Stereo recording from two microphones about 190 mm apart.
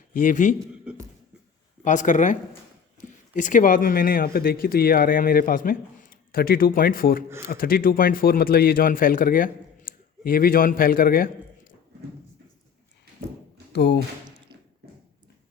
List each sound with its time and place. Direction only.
0.1 s a man's voice: 40° left (ahead or behind)
1.8 s speech: 40° left (ahead or behind)
13.7 s speech: 65° left (ahead or behind)